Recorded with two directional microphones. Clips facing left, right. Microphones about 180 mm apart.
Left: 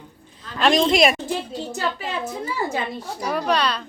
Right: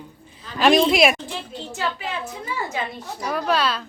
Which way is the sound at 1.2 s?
40° left (ahead or behind).